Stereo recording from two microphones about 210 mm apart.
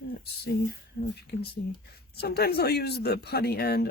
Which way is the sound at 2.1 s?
50° left (ahead or behind).